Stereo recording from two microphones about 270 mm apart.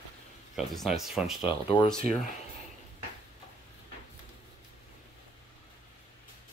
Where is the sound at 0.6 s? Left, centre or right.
Centre.